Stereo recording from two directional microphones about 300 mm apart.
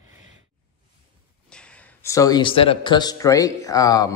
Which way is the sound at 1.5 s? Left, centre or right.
Centre.